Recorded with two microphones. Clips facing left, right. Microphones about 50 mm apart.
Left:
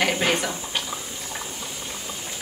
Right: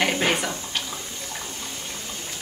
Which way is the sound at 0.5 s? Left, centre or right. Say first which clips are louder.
Left 1 dB; centre.